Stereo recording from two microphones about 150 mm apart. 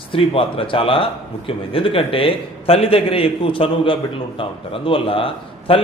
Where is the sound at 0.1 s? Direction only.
35° left (ahead or behind).